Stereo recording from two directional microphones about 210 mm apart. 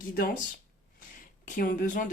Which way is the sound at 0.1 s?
40° left (ahead or behind).